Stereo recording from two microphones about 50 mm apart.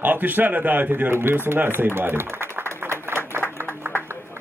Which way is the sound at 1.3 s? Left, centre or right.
Right.